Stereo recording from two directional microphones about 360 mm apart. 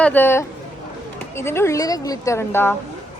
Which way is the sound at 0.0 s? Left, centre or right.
Centre.